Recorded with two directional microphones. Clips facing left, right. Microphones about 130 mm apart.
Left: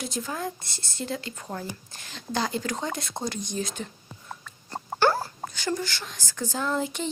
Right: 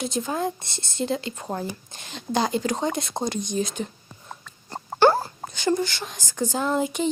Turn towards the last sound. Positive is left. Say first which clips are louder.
# right 4 dB
turn(degrees=-15)  # may be behind; listen again after turning